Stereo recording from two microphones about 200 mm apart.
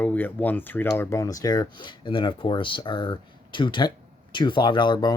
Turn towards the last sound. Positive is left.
turn(degrees=20)  # may be behind; listen again after turning